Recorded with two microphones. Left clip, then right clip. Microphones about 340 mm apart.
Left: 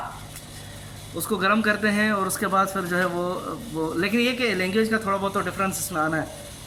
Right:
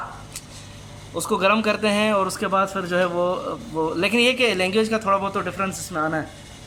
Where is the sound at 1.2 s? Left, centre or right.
Centre.